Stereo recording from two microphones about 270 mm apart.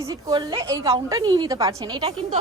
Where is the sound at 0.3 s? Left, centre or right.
Centre.